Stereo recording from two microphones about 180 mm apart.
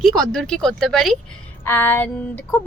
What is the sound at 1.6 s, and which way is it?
Female singing, 10° left (ahead or behind).